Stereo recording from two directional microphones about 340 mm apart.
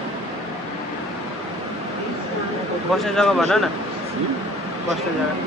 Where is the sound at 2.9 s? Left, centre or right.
Centre.